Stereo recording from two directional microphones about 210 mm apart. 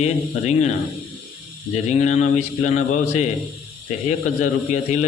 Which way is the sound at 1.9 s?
35° left (ahead or behind).